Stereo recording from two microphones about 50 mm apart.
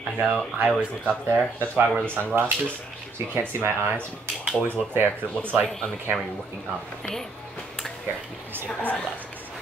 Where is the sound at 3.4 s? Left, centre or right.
Right.